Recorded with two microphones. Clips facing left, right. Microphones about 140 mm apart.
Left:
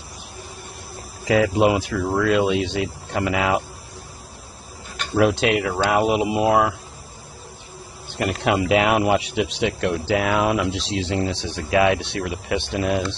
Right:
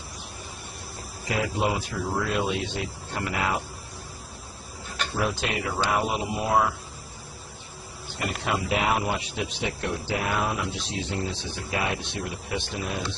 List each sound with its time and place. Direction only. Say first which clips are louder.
1.2 s speech: left 9 dB; 90° left
5.1 s speech: left 11 dB; 75° left (ahead or behind)
8.2 s speech: left 8 dB; 90° left; by 13.0 s 65° left (ahead or behind)